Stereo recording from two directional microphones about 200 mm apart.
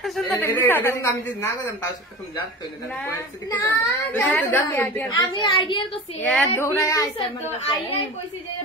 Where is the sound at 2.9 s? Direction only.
15° left (ahead or behind).